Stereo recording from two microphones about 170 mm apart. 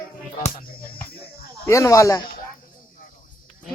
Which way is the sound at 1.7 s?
20° left (ahead or behind).